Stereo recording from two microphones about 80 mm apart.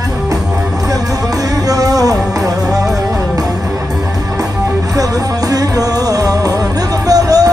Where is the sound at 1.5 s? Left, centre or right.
Right.